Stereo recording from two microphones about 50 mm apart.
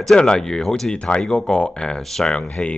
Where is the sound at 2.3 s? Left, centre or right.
Left.